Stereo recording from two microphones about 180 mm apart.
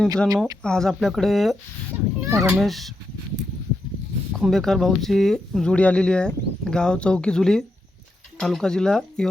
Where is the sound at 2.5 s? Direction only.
Centre (ahead or behind).